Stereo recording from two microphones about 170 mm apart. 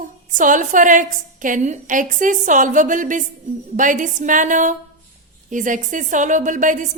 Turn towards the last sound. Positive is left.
turn(degrees=-50)  # may be behind; listen again after turning